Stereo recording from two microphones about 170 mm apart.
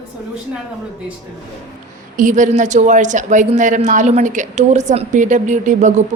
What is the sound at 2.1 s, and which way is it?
Speech, 50° right (ahead or behind).